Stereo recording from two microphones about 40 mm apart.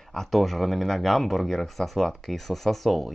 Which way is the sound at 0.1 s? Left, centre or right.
Centre.